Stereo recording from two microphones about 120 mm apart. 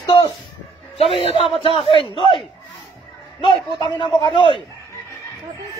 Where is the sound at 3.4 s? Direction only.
40° left (ahead or behind).